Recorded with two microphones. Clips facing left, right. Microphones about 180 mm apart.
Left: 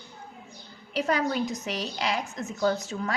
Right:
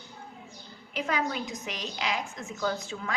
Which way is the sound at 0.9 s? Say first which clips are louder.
Left 4 dB; 40° left (ahead or behind).